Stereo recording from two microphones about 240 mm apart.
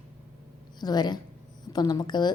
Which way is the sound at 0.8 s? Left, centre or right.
Centre.